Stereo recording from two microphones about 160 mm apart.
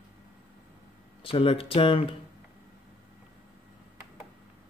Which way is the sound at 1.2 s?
35° left (ahead or behind).